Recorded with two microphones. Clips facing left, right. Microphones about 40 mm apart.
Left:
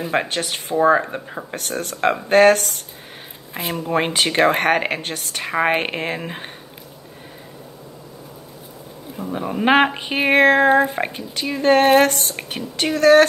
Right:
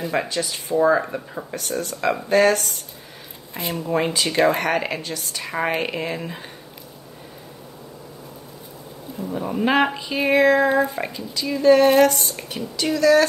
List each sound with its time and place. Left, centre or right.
0.1 s speech: left
3.8 s speech: left
9.2 s speech: left
9.9 s speech: left